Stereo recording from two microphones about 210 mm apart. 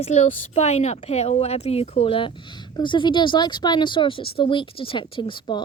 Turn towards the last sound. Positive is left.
turn(degrees=20)  # may be behind; listen again after turning